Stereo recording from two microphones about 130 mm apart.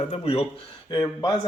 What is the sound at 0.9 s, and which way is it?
Speech, 30° left (ahead or behind).